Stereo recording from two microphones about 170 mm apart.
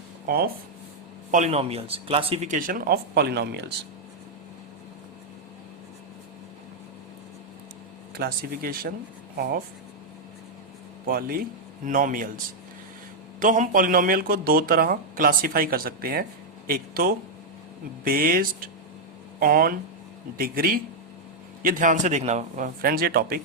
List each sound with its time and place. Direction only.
0.3 s speech: 65° right (ahead or behind)
1.3 s a man's voice: 45° right (ahead or behind)
2.5 s speech: 55° right (ahead or behind); by 3.7 s 75° right (ahead or behind)
8.1 s speech: 65° right (ahead or behind)
11.0 s a man's voice: 60° right (ahead or behind)
13.4 s a man's voice: 50° right (ahead or behind)